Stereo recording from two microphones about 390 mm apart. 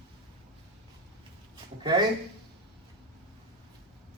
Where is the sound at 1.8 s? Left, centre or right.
Centre.